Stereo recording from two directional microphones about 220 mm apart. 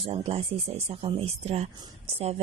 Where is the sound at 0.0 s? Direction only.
25° right (ahead or behind).